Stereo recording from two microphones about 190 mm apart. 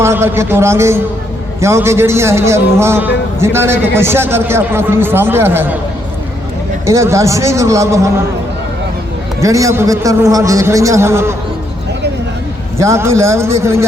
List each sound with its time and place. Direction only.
0.0 s a man's voice: 15° right (ahead or behind)
6.8 s a man's voice: 15° right (ahead or behind)
9.4 s a man's voice: 15° right (ahead or behind)
12.8 s a man's voice: 15° right (ahead or behind)